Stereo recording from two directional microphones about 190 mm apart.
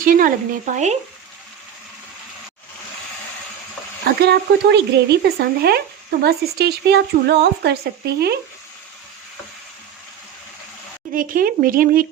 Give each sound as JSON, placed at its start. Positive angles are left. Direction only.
{"t": 0.0, "sound": "a woman's voice", "side_deg": -45}
{"t": 4.0, "sound": "speech", "side_deg": -60}
{"t": 11.1, "sound": "a woman's voice", "side_deg": -45}